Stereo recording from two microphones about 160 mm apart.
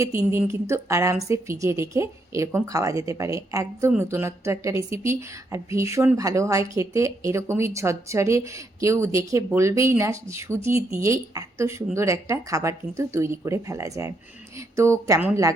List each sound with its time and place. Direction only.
0.0 s speech: 20° right (ahead or behind)